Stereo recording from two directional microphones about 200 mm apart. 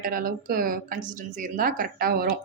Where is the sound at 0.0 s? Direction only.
45° right (ahead or behind).